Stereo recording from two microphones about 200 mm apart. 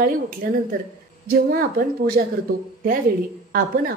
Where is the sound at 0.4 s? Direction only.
45° right (ahead or behind).